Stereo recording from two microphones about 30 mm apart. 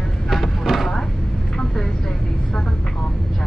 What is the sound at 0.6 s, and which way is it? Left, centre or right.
Vehicle, centre.